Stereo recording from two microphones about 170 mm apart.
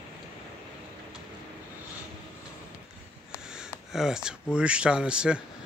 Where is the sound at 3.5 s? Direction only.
5° right (ahead or behind).